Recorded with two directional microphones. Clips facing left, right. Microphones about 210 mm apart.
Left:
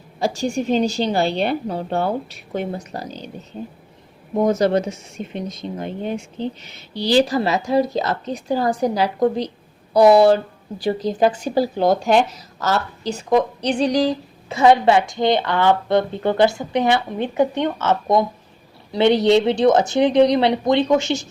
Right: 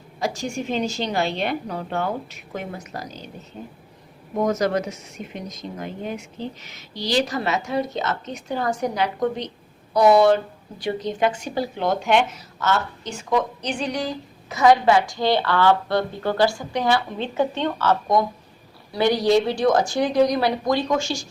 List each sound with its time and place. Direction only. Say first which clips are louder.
0.2 s speech: left 5 dB; 30° left (ahead or behind)
4.4 s a woman's voice: left 4 dB; 30° left (ahead or behind)